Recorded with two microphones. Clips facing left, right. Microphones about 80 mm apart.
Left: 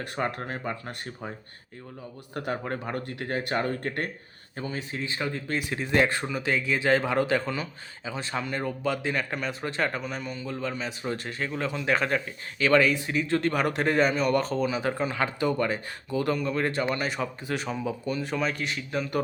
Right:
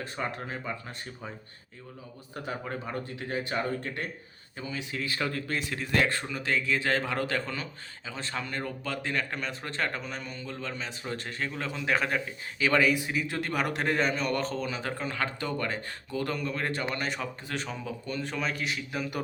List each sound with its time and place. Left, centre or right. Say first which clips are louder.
0.0 s speech: left 4 dB; left
2.3 s speech: left 4 dB; left
4.5 s a man's voice: left 2 dB; left; by 19.2 s centre